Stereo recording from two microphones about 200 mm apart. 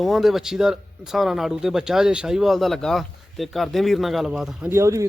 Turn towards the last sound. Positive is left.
turn(degrees=-15)  # may be behind; listen again after turning